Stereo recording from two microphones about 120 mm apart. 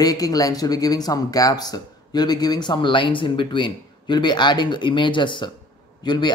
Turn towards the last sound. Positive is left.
turn(degrees=40)  # may be behind; listen again after turning